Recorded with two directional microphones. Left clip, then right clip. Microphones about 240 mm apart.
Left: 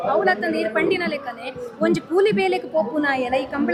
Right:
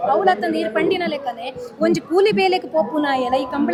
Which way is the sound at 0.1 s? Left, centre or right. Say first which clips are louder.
Right 2 dB; left.